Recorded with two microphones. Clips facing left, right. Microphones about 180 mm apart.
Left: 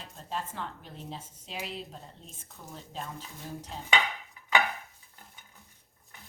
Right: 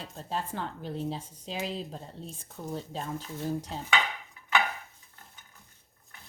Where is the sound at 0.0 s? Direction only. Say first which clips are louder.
Right 3 dB; 35° right (ahead or behind).